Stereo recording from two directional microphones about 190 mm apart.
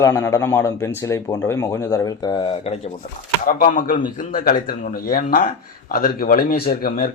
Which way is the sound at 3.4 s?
45° left (ahead or behind).